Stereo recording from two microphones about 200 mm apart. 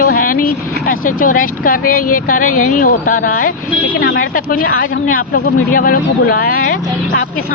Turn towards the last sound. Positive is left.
turn(degrees=45)  # may be behind; listen again after turning